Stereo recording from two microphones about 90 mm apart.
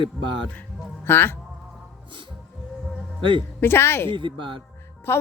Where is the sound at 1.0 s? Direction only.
25° left (ahead or behind).